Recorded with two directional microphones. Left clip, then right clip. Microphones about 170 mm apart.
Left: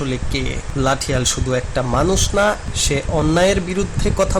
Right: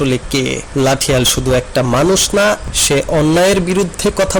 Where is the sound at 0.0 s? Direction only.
40° right (ahead or behind).